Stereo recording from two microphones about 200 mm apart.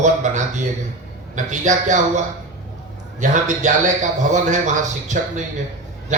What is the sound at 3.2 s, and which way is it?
A man's voice, 40° right (ahead or behind).